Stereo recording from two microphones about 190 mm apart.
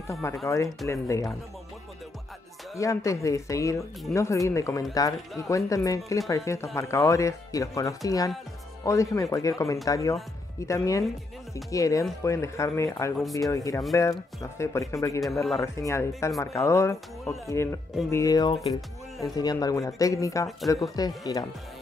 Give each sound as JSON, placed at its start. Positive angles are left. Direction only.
{"t": 0.1, "sound": "speech", "side_deg": 15}
{"t": 2.7, "sound": "speech", "side_deg": 15}
{"t": 15.2, "sound": "speech", "side_deg": 0}
{"t": 15.6, "sound": "speech", "side_deg": 15}